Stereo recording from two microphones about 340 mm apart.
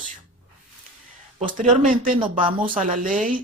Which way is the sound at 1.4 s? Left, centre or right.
Right.